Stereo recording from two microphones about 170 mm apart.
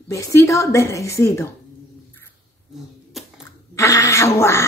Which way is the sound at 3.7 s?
20° left (ahead or behind).